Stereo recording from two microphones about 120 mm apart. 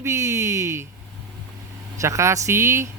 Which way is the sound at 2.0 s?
25° right (ahead or behind).